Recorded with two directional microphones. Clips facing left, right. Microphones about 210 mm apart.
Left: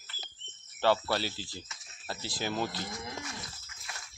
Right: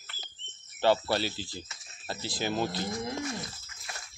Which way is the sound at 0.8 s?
20° right (ahead or behind).